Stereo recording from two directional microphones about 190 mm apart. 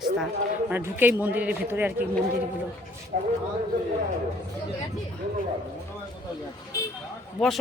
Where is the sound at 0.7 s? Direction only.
10° right (ahead or behind).